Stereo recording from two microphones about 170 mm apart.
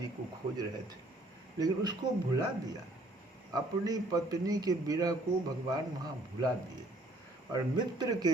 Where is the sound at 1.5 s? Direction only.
25° right (ahead or behind).